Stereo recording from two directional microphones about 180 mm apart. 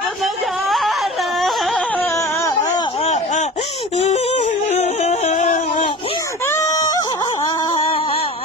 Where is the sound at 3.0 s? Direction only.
40° left (ahead or behind).